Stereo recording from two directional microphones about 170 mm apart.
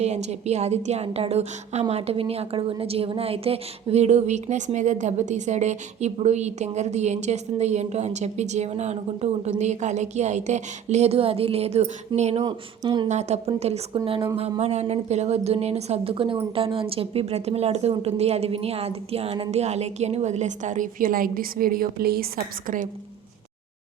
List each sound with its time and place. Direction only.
0.0 s a woman's voice: 40° right (ahead or behind)
12.4 s speech: 25° right (ahead or behind)
13.1 s a woman's voice: 40° right (ahead or behind)